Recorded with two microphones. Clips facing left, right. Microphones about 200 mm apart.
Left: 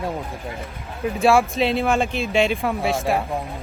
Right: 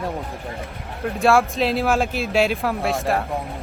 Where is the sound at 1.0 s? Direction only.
Centre (ahead or behind).